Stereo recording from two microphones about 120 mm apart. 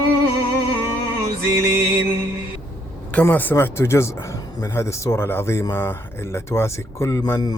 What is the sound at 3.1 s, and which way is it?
Speech, 15° left (ahead or behind).